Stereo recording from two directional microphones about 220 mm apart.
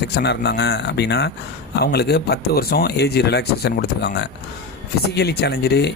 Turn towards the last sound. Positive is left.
turn(degrees=50)  # may be behind; listen again after turning